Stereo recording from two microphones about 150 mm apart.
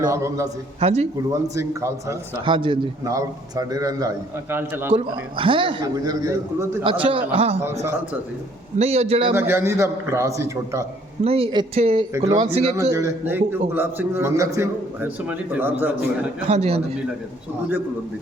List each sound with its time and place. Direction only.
0.1 s a man's voice: 20° right (ahead or behind)
0.8 s a man's voice: 45° right (ahead or behind)
1.3 s a man's voice: 20° right (ahead or behind)
2.4 s a man's voice: 35° right (ahead or behind)
3.0 s a man's voice: 20° right (ahead or behind)
4.9 s a man's voice: 35° right (ahead or behind)
6.2 s a man's voice: 20° right (ahead or behind)
7.0 s a man's voice: 40° right (ahead or behind)
7.6 s a man's voice: 15° right (ahead or behind)
8.8 s a man's voice: 45° right (ahead or behind)
9.3 s a man's voice: 15° right (ahead or behind)
11.2 s a man's voice: 40° right (ahead or behind)
12.1 s a man's voice: 25° right (ahead or behind)
16.5 s a man's voice: 40° right (ahead or behind)